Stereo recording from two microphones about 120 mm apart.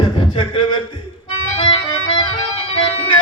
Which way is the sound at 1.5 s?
45° left (ahead or behind).